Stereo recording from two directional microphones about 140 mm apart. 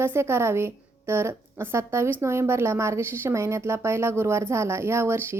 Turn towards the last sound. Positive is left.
turn(degrees=-20)  # may be behind; listen again after turning